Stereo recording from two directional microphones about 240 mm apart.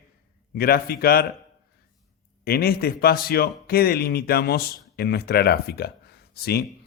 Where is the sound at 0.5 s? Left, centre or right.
Left.